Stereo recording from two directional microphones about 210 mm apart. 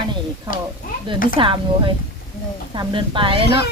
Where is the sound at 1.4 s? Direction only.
25° right (ahead or behind).